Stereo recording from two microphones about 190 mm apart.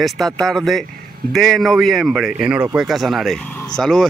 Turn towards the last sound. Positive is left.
turn(degrees=0)  # may be behind; listen again after turning